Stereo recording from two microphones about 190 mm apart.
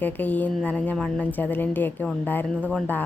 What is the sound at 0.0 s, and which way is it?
A woman's voice, 10° left (ahead or behind).